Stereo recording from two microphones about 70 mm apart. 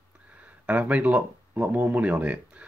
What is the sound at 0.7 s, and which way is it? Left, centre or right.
Speech, centre.